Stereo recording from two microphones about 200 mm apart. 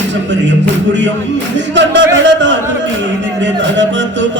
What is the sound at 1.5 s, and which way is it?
Speech, 65° right (ahead or behind).